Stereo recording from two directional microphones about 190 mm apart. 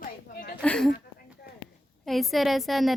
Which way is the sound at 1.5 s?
50° left (ahead or behind).